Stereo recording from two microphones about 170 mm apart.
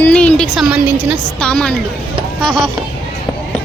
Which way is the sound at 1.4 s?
5° left (ahead or behind).